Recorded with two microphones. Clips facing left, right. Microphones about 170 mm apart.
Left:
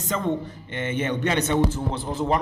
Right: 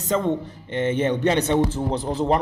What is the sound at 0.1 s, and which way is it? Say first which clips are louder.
A man's voice: right 3 dB; 30° right (ahead or behind).